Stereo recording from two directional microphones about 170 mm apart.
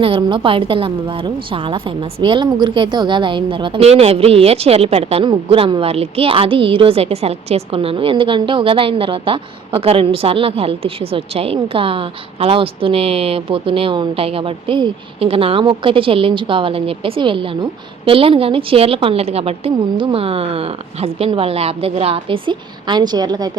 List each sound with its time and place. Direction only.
0.0 s a woman's voice: 30° right (ahead or behind)